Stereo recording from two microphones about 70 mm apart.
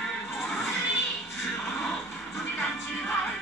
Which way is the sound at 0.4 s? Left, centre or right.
Centre.